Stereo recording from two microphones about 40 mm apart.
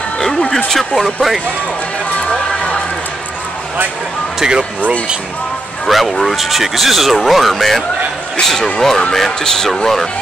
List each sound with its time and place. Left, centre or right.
0.7 s speech: centre
4.4 s speech: centre
5.9 s speech: centre